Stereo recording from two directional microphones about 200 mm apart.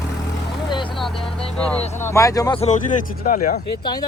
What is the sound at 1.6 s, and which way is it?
Speech, 5° left (ahead or behind).